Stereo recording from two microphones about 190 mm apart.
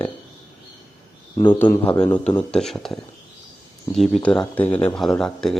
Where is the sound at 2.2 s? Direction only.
5° left (ahead or behind).